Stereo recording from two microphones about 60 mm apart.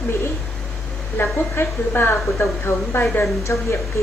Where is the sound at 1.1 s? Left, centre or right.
Left.